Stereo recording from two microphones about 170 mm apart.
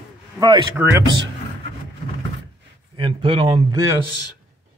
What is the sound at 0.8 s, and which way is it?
Speech, 15° right (ahead or behind).